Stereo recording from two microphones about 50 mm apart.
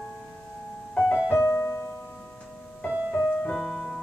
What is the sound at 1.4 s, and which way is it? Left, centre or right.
Piano, left.